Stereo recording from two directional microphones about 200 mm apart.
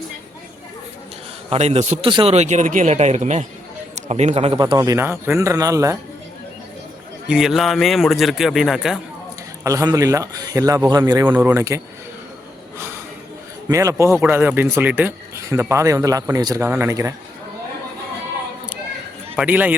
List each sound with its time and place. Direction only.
1.5 s speech: 35° right (ahead or behind); by 6.0 s 15° right (ahead or behind)
7.3 s a man's voice: 5° right (ahead or behind)
9.6 s speech: 15° right (ahead or behind)
13.7 s speech: 15° right (ahead or behind)
19.4 s speech: 10° right (ahead or behind)